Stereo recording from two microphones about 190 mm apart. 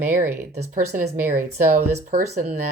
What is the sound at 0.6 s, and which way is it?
Speech, 35° right (ahead or behind).